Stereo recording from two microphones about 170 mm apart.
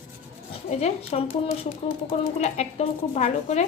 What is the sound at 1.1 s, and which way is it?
Speech, 40° left (ahead or behind).